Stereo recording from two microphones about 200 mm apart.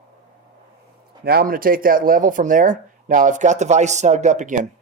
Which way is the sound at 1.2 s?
50° right (ahead or behind).